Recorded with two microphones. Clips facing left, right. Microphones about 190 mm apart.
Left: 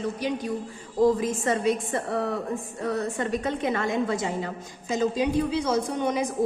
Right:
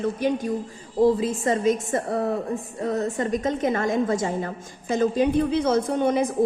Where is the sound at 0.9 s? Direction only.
35° right (ahead or behind).